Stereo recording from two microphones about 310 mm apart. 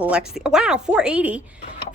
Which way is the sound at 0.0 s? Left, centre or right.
Centre.